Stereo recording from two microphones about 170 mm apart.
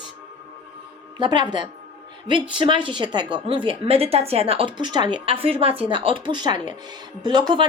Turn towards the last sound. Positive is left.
turn(degrees=-25)  # may be behind; listen again after turning